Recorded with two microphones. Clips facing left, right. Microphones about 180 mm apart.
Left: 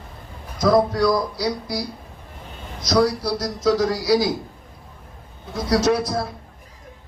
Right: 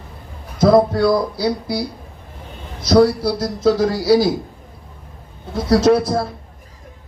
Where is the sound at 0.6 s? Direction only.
30° right (ahead or behind).